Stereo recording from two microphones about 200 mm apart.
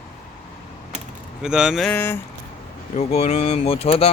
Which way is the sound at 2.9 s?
30° left (ahead or behind).